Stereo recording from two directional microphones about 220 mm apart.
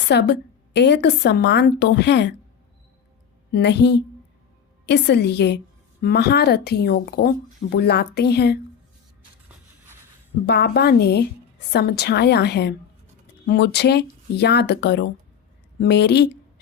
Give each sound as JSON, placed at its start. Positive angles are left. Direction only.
{"t": 0.1, "sound": "speech", "side_deg": 50}
{"t": 3.5, "sound": "speech", "side_deg": 50}
{"t": 10.4, "sound": "speech", "side_deg": 45}